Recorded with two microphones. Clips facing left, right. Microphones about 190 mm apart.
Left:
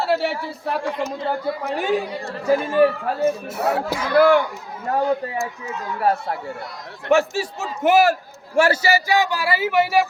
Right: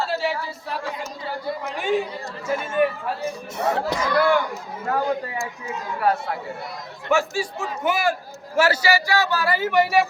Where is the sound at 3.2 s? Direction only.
5° left (ahead or behind).